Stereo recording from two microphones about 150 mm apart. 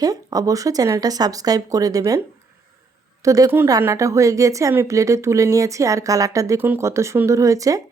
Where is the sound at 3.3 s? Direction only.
20° right (ahead or behind).